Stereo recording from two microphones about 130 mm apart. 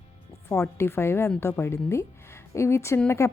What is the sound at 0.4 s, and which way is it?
Speech, 20° left (ahead or behind).